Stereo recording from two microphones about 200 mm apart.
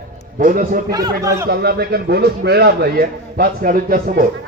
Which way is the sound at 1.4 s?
50° right (ahead or behind).